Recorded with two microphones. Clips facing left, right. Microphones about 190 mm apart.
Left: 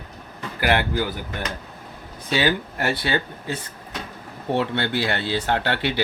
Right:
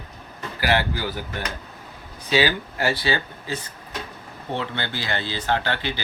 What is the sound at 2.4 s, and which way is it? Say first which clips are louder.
Speech: left 3 dB; 60° left (ahead or behind).